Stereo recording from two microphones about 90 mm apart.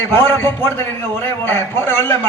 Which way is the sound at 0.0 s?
25° left (ahead or behind).